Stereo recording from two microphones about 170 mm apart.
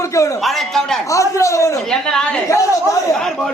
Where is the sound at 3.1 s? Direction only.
5° left (ahead or behind).